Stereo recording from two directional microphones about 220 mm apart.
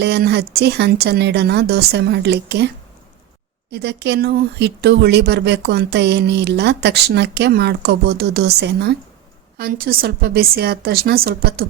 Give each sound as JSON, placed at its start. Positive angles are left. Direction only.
{"t": 0.0, "sound": "speech", "side_deg": -50}